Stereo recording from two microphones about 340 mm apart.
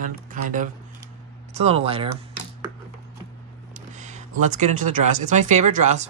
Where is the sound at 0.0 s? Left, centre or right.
Right.